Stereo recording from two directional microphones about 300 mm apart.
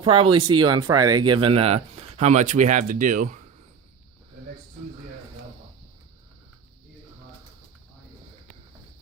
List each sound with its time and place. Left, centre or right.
0.0 s speech: centre